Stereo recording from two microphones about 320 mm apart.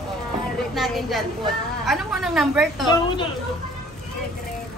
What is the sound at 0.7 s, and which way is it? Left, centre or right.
A woman's voice, centre.